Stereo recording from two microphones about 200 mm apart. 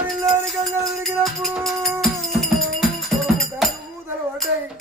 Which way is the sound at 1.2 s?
Centre (ahead or behind).